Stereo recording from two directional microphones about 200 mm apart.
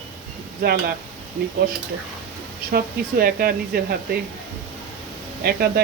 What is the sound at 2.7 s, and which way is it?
Speech, 50° right (ahead or behind).